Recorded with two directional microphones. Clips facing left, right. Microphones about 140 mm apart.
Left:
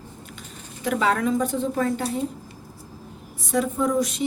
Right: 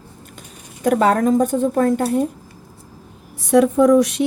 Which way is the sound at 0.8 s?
45° right (ahead or behind).